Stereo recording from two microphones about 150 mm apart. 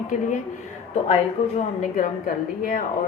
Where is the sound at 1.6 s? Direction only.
60° left (ahead or behind).